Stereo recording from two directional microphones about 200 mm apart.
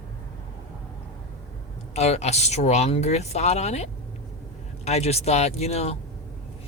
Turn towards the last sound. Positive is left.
turn(degrees=30)  # may be behind; listen again after turning